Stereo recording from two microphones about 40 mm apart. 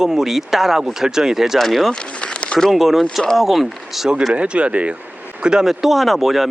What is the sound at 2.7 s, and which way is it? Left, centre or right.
Speech, centre.